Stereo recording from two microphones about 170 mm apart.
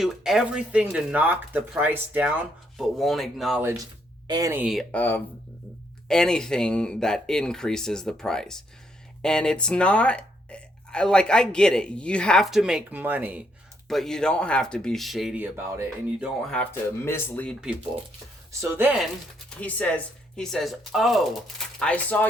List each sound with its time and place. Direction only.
0.0 s speech: 5° right (ahead or behind)
2.7 s speech: centre (ahead or behind)
3.6 s speech: 15° right (ahead or behind)
4.5 s speech: 5° right (ahead or behind)
4.9 s speech: 10° left (ahead or behind); by 13.4 s 10° right (ahead or behind)
13.8 s speech: centre (ahead or behind)
16.4 s speech: 5° left (ahead or behind)
18.6 s speech: 10° right (ahead or behind)
19.5 s speech: 10° left (ahead or behind)